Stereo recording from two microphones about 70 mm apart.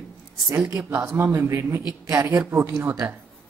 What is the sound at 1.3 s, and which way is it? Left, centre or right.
Speech, right.